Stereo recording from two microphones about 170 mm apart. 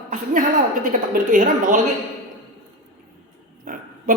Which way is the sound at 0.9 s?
50° right (ahead or behind).